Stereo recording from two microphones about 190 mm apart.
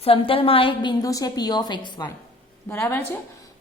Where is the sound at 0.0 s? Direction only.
30° left (ahead or behind).